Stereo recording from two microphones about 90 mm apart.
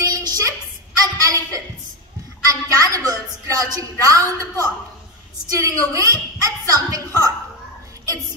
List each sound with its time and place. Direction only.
0.0 s a sound: 45° right (ahead or behind)
5.5 s a woman's voice: 40° right (ahead or behind)
6.4 s music: 40° right (ahead or behind)